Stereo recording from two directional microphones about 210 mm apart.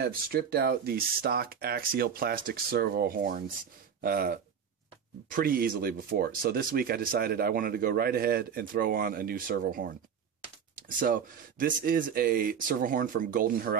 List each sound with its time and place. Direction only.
0.0 s speech: 45° right (ahead or behind)